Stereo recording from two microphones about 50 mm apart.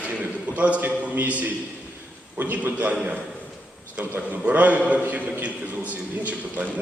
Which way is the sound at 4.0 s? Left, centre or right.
Right.